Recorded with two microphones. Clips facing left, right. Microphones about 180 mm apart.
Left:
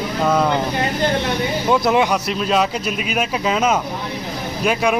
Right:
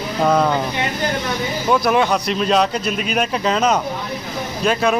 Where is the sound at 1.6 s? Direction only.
20° left (ahead or behind).